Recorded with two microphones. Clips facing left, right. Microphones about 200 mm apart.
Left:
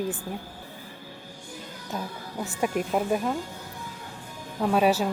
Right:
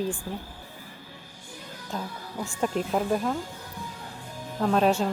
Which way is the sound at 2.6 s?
10° left (ahead or behind).